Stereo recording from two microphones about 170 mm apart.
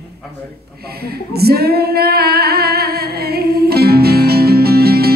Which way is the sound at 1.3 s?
65° right (ahead or behind).